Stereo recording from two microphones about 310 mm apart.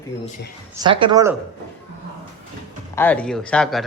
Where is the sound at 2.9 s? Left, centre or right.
Centre.